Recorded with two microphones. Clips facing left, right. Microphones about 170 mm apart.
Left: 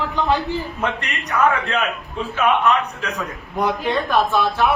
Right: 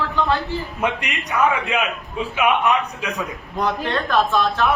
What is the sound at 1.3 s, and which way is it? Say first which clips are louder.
A man's voice: left 1 dB; 10° right (ahead or behind).